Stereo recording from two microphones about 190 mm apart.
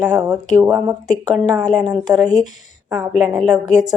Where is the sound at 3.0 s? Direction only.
Centre (ahead or behind).